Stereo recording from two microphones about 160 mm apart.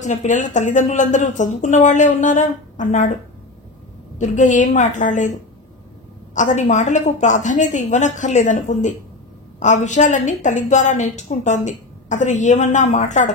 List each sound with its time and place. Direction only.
0.0 s a woman's voice: 50° left (ahead or behind)
4.2 s a woman's voice: 50° left (ahead or behind)
6.3 s a woman's voice: 50° left (ahead or behind)